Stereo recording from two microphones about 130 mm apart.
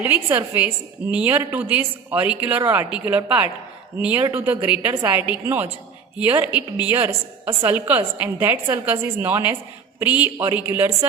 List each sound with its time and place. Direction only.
0.3 s a woman's voice: 15° right (ahead or behind)